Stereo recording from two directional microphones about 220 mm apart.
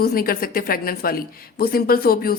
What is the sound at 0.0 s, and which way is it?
A woman's voice, 40° left (ahead or behind).